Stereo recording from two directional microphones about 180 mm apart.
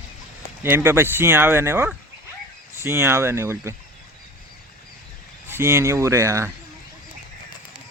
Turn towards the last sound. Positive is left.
turn(degrees=-15)  # may be behind; listen again after turning